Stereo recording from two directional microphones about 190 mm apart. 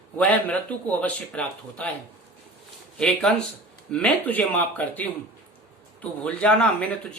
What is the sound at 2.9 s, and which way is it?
Speech, 5° left (ahead or behind).